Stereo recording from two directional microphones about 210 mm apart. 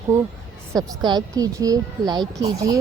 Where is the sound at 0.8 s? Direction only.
20° right (ahead or behind).